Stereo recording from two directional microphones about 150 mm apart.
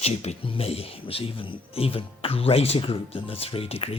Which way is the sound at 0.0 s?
45° left (ahead or behind).